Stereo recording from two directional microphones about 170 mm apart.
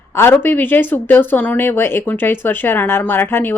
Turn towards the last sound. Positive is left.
turn(degrees=10)  # may be behind; listen again after turning